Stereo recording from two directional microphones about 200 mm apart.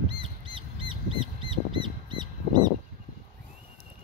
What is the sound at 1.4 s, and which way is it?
Crow, 25° right (ahead or behind).